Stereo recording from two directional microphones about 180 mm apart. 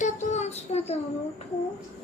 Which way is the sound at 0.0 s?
40° left (ahead or behind).